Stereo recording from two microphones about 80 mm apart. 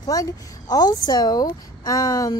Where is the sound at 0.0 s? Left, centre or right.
Left.